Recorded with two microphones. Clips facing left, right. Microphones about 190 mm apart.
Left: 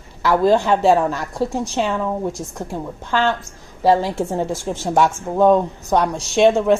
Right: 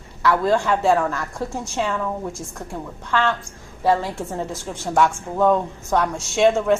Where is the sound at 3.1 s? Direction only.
25° left (ahead or behind).